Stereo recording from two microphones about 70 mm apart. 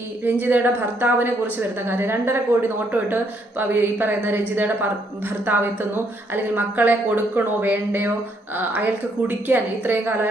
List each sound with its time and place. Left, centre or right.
0.3 s a woman's voice: right
6.3 s speech: right